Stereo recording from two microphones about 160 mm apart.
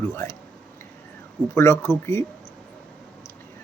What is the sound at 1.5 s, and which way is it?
Speech, 15° left (ahead or behind).